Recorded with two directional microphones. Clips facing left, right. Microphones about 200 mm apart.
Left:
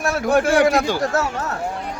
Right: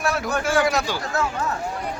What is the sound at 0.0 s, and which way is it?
A man's voice, 55° left (ahead or behind).